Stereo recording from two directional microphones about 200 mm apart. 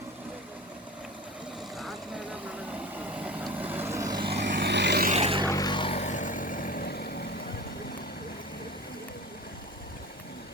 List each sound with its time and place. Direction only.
1.8 s vehicle: 5° right (ahead or behind); by 4.3 s 20° right (ahead or behind)
4.3 s vehicle: 55° right (ahead or behind)
5.0 s a sound: 30° right (ahead or behind)
5.5 s vehicle: 20° left (ahead or behind); by 7.3 s 50° left (ahead or behind)